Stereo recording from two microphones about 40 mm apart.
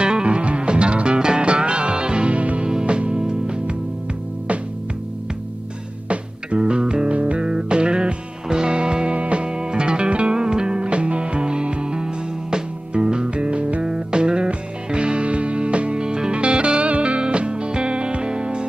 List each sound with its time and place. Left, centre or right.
0.0 s music: right
2.7 s music: centre
6.0 s music: right
7.1 s music: right
13.8 s music: right